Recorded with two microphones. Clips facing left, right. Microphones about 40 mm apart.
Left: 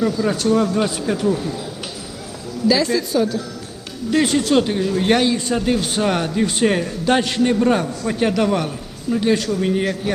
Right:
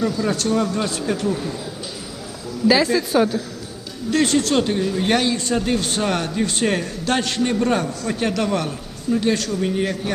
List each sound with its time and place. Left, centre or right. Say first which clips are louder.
0.0 s speech: left 2 dB; centre
2.6 s a woman's voice: right 1 dB; centre
3.1 s a woman's voice: right 1 dB; right
4.1 s speech: left 2 dB; centre